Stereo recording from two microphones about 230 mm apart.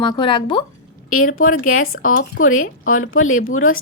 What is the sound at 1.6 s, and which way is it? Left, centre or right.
A woman's voice, left.